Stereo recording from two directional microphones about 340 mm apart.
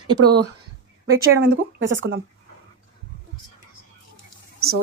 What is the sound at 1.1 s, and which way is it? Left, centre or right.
Speech, right.